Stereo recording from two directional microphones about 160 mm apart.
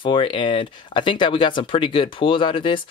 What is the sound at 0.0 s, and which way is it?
Speech, 35° left (ahead or behind).